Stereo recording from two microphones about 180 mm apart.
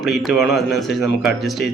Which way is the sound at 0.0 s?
Centre (ahead or behind).